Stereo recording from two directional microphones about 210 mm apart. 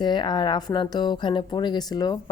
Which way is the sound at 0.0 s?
20° left (ahead or behind).